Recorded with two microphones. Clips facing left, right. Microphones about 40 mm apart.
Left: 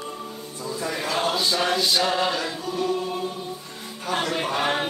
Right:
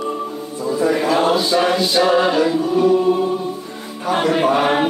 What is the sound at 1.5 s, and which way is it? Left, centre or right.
Choir, centre.